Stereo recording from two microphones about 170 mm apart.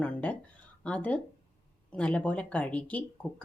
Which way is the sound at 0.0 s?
10° left (ahead or behind).